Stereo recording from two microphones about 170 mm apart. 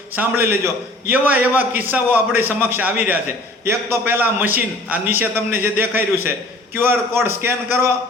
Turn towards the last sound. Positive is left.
turn(degrees=-15)  # may be behind; listen again after turning